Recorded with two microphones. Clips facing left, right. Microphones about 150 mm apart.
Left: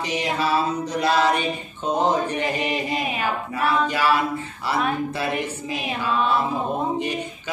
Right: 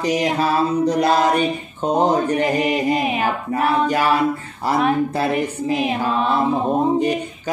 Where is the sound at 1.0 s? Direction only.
45° right (ahead or behind).